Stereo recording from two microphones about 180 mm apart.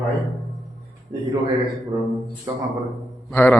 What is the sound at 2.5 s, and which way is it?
Speech, 15° right (ahead or behind).